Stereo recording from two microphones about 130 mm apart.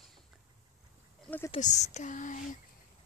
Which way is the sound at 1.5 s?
65° left (ahead or behind).